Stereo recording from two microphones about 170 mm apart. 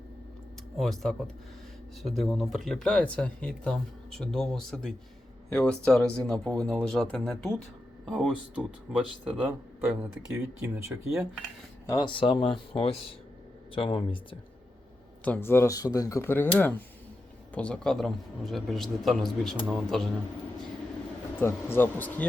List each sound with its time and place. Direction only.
0.8 s speech: centre (ahead or behind)
9.2 s speech: 10° right (ahead or behind)
11.9 s speech: 25° left (ahead or behind)
15.2 s speech: 10° left (ahead or behind)
21.3 s speech: 15° left (ahead or behind)